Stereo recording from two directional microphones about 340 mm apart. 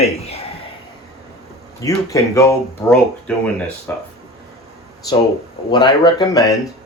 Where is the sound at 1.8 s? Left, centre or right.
Centre.